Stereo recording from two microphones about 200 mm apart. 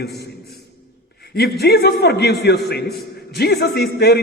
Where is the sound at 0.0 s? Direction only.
55° left (ahead or behind).